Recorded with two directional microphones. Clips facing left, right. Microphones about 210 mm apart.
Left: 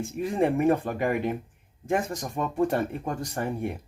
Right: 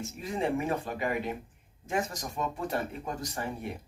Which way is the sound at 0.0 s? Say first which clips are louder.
Left 7 dB; 55° left (ahead or behind).